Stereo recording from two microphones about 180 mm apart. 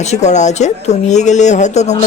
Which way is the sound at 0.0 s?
40° left (ahead or behind).